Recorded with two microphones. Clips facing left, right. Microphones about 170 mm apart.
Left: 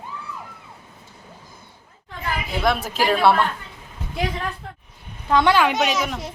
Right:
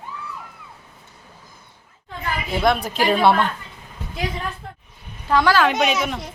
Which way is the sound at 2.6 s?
Centre (ahead or behind).